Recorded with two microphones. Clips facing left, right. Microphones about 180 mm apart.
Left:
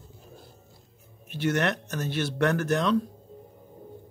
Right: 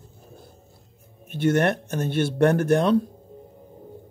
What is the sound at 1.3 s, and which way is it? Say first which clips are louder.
Speech: right 5 dB; 50° right (ahead or behind).